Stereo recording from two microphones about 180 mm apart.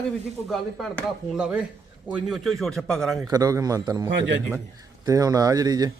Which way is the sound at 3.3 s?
20° right (ahead or behind).